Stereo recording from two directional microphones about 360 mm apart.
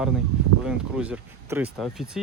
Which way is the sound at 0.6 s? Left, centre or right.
Centre.